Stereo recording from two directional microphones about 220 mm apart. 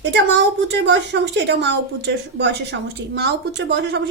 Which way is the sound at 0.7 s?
50° right (ahead or behind).